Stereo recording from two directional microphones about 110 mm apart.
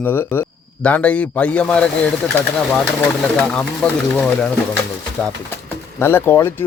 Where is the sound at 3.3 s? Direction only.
5° left (ahead or behind).